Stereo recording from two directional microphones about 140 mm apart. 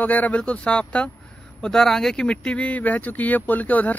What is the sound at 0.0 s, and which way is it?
Speech, 10° left (ahead or behind).